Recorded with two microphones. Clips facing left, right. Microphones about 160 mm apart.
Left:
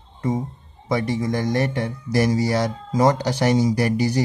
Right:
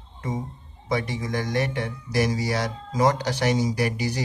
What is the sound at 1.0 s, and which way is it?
Speech, 40° left (ahead or behind).